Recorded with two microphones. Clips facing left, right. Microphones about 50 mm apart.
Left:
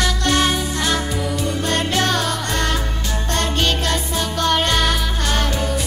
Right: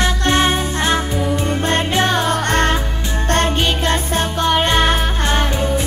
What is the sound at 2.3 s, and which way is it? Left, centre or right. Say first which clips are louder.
Music: right 5 dB; right.